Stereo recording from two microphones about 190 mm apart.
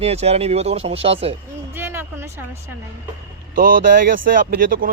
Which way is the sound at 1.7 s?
10° right (ahead or behind).